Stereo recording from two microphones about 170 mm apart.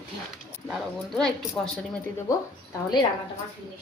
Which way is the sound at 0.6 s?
Centre (ahead or behind).